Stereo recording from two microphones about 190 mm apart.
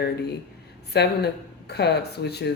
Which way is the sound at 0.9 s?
60° left (ahead or behind).